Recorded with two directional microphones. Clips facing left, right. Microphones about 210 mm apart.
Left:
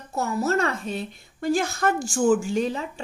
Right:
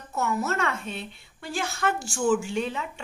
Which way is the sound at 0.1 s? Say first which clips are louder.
Left 4 dB; 35° left (ahead or behind).